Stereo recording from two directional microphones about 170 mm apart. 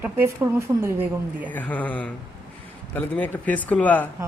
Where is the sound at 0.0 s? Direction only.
15° right (ahead or behind).